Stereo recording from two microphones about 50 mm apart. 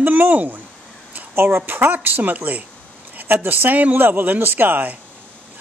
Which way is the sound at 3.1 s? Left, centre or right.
Right.